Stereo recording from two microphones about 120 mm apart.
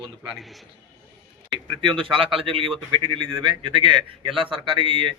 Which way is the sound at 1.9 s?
45° right (ahead or behind).